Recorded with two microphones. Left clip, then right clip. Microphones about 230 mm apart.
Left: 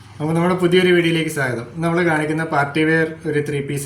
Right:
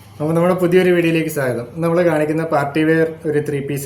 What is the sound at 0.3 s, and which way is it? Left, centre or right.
Speech, centre.